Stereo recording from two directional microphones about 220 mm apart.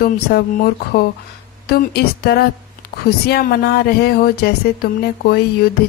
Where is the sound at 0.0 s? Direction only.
45° left (ahead or behind).